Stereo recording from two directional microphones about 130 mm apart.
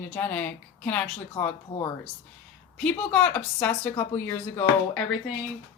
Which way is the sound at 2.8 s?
10° left (ahead or behind).